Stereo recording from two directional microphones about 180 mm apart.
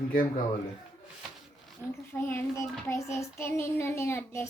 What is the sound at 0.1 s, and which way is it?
Speech, 50° left (ahead or behind).